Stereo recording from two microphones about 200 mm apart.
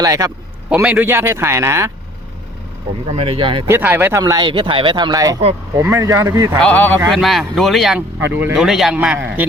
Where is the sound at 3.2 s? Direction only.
30° right (ahead or behind).